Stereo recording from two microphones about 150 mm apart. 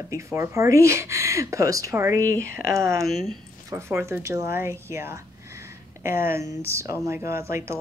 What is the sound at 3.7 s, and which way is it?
Speech, 20° right (ahead or behind).